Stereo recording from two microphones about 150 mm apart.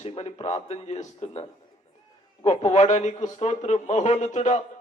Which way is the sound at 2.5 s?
45° left (ahead or behind).